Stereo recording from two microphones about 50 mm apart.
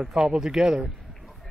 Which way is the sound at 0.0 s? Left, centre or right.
Centre.